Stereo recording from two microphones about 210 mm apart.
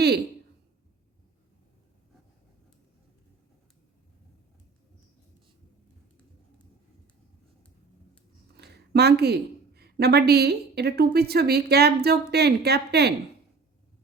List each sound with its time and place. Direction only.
8.5 s a woman's voice: 50° right (ahead or behind)